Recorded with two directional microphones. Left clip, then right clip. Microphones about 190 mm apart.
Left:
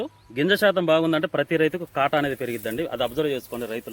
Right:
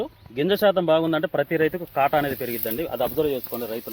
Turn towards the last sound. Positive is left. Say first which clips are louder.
# right 1 dB
turn(degrees=30)  # may be behind; listen again after turning